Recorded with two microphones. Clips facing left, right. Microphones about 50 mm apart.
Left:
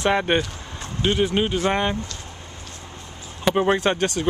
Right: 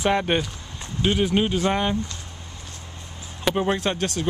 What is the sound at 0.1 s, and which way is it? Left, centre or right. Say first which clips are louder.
Speech: left 2 dB; centre.